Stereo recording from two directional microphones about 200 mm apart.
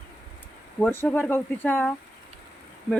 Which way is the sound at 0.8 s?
10° left (ahead or behind).